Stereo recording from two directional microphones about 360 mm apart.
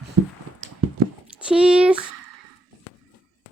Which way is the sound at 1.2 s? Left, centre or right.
Centre.